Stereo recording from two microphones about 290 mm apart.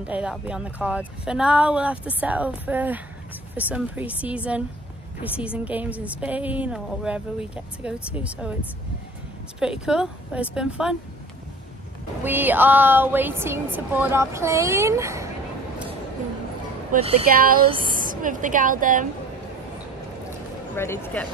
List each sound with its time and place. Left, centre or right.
0.0 s a woman's voice: centre
9.6 s a woman's voice: centre
12.2 s speech: centre
16.9 s a woman's voice: right
17.6 s a sound: centre
18.0 s a woman's voice: right
20.7 s speech: centre